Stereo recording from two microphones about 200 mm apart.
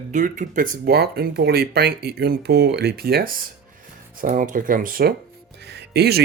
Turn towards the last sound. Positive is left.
turn(degrees=-55)  # may be behind; listen again after turning